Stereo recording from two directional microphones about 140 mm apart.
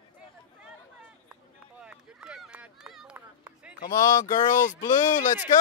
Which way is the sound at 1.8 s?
5° right (ahead or behind).